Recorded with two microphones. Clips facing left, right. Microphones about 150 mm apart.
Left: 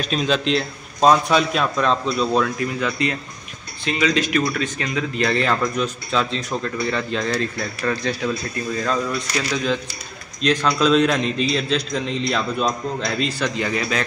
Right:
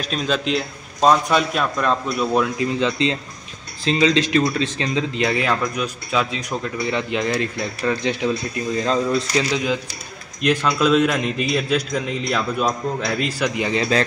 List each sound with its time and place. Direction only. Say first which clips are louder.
0.0 s a man's voice: left 2 dB; centre (ahead or behind)
2.7 s speech: right 3 dB; 25° right (ahead or behind)
10.4 s a man's voice: even; 5° right (ahead or behind)
13.7 s speech: right 4 dB; 30° right (ahead or behind)